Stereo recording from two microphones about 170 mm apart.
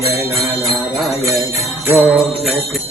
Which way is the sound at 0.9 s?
Centre (ahead or behind).